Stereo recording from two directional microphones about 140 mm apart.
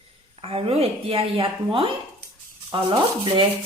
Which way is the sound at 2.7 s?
35° right (ahead or behind).